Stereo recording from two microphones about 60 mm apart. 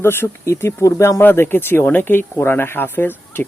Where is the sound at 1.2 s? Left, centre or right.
Left.